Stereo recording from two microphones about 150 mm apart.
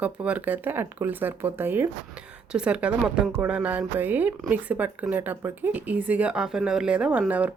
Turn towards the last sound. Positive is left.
turn(degrees=-10)  # may be behind; listen again after turning